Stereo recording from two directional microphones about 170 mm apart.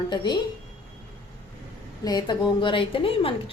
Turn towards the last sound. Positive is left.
turn(degrees=35)  # may be behind; listen again after turning